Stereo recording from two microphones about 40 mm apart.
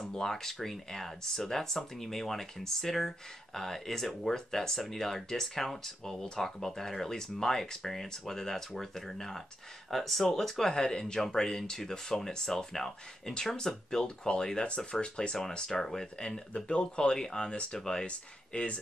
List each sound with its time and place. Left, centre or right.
0.0 s speech: centre; by 18.8 s left